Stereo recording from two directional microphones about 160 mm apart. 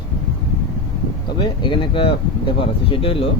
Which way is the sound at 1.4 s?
30° left (ahead or behind).